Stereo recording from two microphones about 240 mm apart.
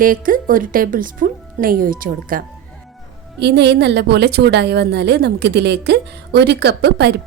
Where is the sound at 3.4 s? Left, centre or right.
Right.